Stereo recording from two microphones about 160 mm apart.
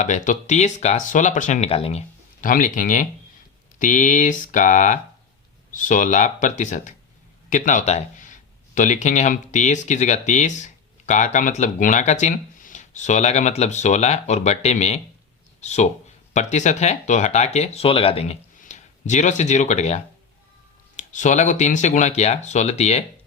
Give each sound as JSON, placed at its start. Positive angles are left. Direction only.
{"t": 0.0, "sound": "speech", "side_deg": 50}
{"t": 2.4, "sound": "speech", "side_deg": 55}